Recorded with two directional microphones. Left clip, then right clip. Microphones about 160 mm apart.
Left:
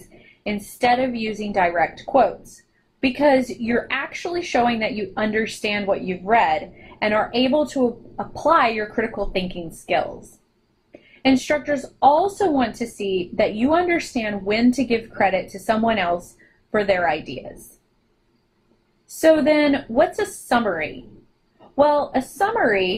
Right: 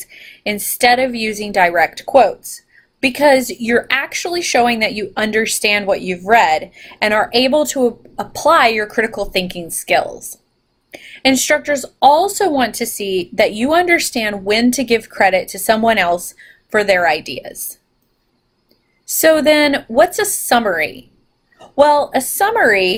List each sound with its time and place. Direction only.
0.4 s a woman's voice: 20° right (ahead or behind)
11.2 s a woman's voice: 20° right (ahead or behind)
19.2 s a woman's voice: 20° right (ahead or behind)